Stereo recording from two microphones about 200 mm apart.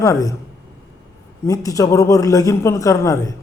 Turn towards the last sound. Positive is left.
turn(degrees=15)  # may be behind; listen again after turning